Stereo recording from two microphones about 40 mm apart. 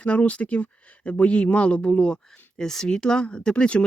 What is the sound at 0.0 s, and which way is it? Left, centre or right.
Speech, left.